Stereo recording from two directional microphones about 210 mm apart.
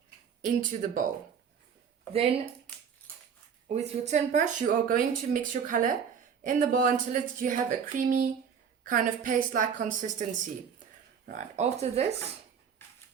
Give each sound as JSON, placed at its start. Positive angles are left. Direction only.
{"t": 0.4, "sound": "speech", "side_deg": -40}
{"t": 3.7, "sound": "speech", "side_deg": -35}
{"t": 12.8, "sound": "a sound", "side_deg": 10}